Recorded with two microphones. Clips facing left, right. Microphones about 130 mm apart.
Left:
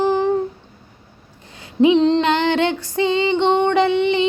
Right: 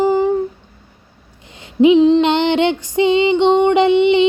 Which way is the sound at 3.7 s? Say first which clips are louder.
Right 5 dB; 20° right (ahead or behind).